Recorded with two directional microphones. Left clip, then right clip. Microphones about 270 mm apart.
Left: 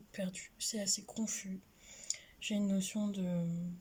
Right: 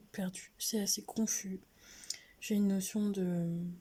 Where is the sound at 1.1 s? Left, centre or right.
Right.